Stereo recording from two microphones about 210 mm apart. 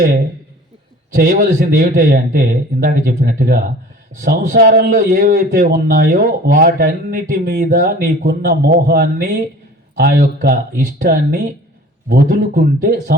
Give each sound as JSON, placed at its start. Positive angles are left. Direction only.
{"t": 1.1, "sound": "a man's voice", "side_deg": -45}